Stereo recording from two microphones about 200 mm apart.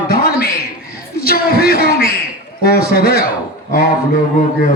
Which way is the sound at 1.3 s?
50° left (ahead or behind).